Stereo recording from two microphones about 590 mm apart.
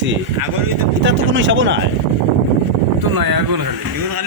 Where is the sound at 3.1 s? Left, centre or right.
Right.